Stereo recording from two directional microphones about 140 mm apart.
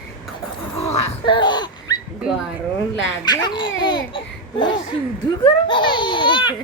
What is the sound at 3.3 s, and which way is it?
Speech, 30° left (ahead or behind).